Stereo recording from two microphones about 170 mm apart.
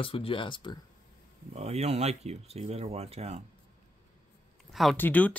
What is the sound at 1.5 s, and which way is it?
Speech, 40° right (ahead or behind).